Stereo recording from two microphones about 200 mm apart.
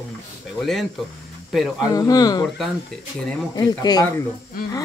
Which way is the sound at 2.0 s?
20° left (ahead or behind).